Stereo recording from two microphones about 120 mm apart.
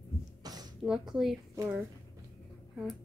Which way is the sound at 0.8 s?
5° right (ahead or behind).